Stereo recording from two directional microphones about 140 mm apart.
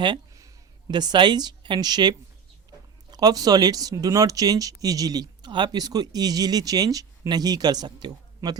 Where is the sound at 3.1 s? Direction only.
25° right (ahead or behind).